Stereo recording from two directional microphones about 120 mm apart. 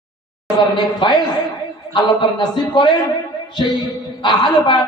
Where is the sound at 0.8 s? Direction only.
40° left (ahead or behind).